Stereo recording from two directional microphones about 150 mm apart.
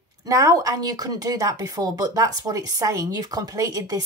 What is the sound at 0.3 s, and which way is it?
Speech, 25° right (ahead or behind).